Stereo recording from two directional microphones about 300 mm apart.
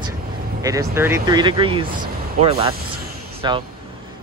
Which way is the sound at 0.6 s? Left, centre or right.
Centre.